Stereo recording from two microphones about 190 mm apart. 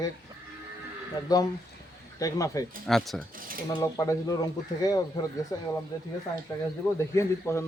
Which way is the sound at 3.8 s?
20° left (ahead or behind).